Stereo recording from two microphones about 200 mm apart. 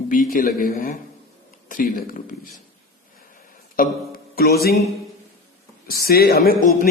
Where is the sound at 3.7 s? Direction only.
50° left (ahead or behind).